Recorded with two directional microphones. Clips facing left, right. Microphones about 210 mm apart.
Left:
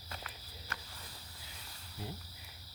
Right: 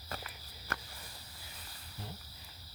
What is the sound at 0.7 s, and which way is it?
Cricket, 55° right (ahead or behind).